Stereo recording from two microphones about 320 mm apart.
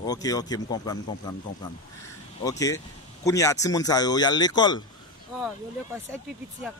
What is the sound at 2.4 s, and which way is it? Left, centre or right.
A man's voice, centre.